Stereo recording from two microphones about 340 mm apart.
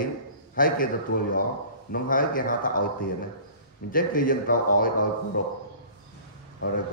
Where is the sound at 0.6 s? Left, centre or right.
Left.